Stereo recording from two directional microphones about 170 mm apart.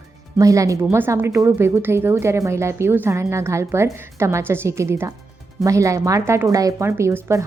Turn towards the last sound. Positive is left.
turn(degrees=-15)  # may be behind; listen again after turning